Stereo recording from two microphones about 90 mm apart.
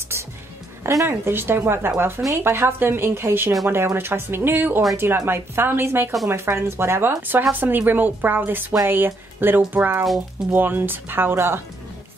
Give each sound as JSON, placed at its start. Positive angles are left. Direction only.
{"t": 0.8, "sound": "speech", "side_deg": -30}